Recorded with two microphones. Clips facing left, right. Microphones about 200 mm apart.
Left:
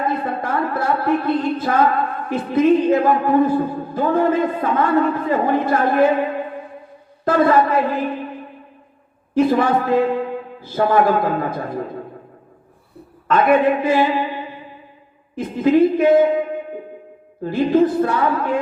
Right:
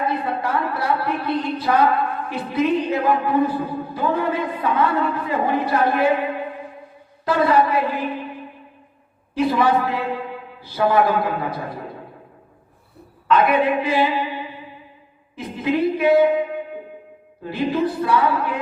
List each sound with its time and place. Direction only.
0.0 s a woman's voice: 50° left (ahead or behind)
7.3 s speech: 50° left (ahead or behind)
9.3 s a man's voice: 45° left (ahead or behind)
13.2 s speech: 50° left (ahead or behind)
15.4 s speech: 50° left (ahead or behind)
17.4 s speech: 50° left (ahead or behind)